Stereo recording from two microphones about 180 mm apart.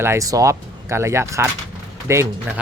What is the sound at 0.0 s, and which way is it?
Speech, 15° right (ahead or behind).